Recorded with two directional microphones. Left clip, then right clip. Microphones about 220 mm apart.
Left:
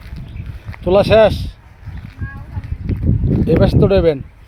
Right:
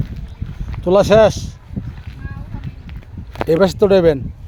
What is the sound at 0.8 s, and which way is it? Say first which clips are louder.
Speech: even; 10° right (ahead or behind).